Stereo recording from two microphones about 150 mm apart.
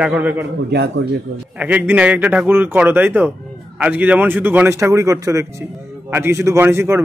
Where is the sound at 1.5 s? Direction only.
10° right (ahead or behind).